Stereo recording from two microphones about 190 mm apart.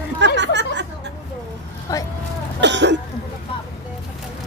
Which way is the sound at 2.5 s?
65° right (ahead or behind).